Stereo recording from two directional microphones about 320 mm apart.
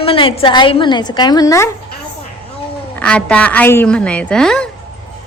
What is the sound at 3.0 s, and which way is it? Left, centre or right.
A woman's voice, centre.